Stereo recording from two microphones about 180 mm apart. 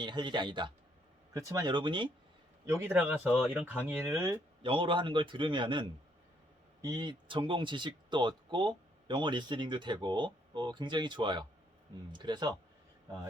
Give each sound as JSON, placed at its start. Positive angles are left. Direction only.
{"t": 0.0, "sound": "speech", "side_deg": -25}
{"t": 2.6, "sound": "speech", "side_deg": -15}
{"t": 4.6, "sound": "speech", "side_deg": -30}